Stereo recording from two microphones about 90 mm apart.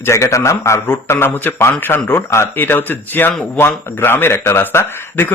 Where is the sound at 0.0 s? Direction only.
35° left (ahead or behind).